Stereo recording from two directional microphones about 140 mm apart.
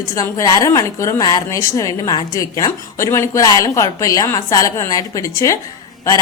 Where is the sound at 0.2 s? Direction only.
25° left (ahead or behind).